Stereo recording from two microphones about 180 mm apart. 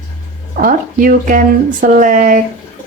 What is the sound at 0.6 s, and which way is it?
Speech, 50° right (ahead or behind).